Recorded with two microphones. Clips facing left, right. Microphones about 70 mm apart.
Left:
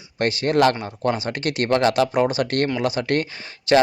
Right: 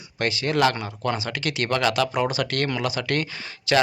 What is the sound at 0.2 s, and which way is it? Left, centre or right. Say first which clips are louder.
Speech: left 3 dB; left.